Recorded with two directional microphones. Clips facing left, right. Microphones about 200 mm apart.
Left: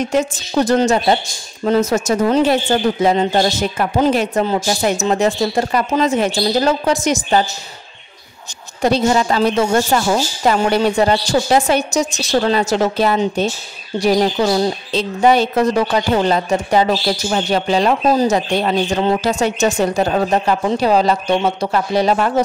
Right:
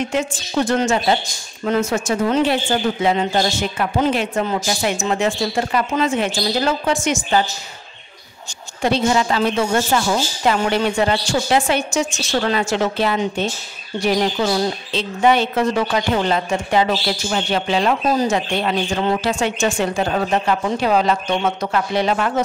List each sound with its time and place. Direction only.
0.0 s speech: 40° left (ahead or behind)
8.8 s speech: 40° left (ahead or behind)